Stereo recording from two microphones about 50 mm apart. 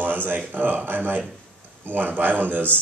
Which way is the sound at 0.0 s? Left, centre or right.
Right.